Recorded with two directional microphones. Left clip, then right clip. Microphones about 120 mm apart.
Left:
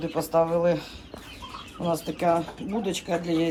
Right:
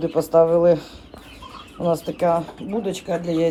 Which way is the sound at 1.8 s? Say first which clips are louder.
Right 5 dB; 60° right (ahead or behind).